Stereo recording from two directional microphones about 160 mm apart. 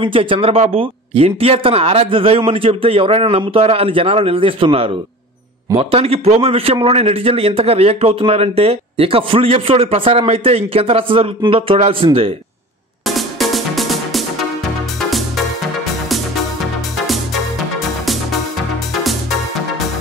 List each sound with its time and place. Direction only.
0.0 s a man's voice: 35° right (ahead or behind)
13.0 s music: centre (ahead or behind)